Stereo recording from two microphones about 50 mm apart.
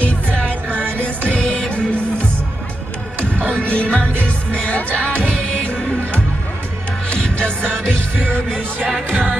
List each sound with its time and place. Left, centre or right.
0.5 s music: right
1.3 s music: left
3.4 s music: left
7.2 s music: left
9.1 s music: right